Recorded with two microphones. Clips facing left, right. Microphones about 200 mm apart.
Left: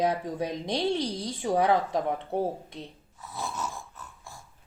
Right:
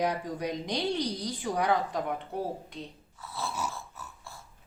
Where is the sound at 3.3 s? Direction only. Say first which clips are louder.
Left 1 dB; 15° left (ahead or behind).